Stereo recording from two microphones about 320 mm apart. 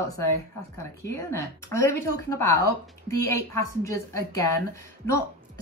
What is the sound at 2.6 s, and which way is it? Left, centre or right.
Speech, left.